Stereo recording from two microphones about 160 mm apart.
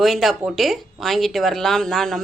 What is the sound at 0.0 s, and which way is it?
Speech, centre (ahead or behind).